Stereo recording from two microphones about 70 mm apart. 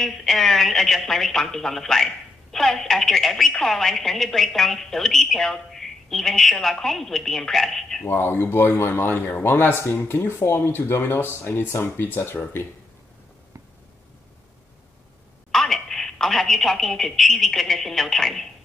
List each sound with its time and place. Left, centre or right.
0.0 s a woman's voice: centre
8.1 s speech: left
15.5 s speech: centre